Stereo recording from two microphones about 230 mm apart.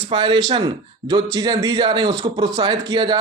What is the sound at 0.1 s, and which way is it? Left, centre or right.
Speech, centre.